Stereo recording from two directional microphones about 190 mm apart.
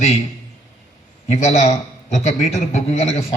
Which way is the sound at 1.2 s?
35° left (ahead or behind).